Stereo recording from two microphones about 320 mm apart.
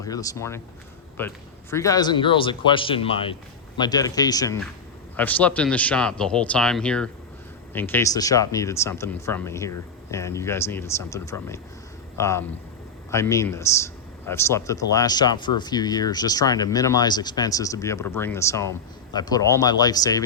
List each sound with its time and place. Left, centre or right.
0.0 s speech: centre